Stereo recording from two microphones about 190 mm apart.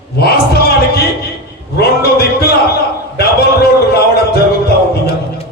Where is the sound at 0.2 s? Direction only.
55° left (ahead or behind).